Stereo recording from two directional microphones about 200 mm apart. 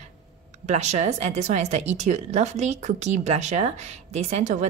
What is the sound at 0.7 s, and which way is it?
Speech, 35° right (ahead or behind).